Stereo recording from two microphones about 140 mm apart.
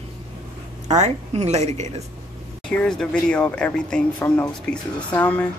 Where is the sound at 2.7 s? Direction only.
5° left (ahead or behind).